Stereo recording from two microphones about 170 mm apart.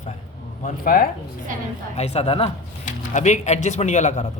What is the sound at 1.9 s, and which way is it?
Speech, 40° left (ahead or behind).